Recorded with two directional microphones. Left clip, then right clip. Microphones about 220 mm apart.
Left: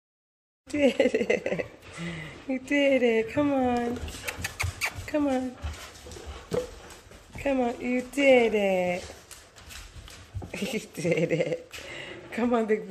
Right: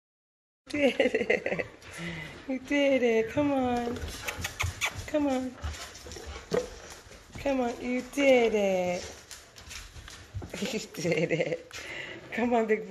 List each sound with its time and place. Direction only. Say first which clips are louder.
0.7 s speech: left 2 dB; 15° left (ahead or behind)
7.3 s speech: left 2 dB; 5° left (ahead or behind)
10.5 s speech: left 1 dB; 5° left (ahead or behind)